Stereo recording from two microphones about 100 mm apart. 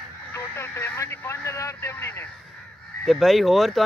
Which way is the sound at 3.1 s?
Centre (ahead or behind).